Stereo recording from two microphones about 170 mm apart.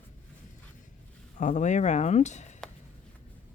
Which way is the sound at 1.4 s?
45° left (ahead or behind).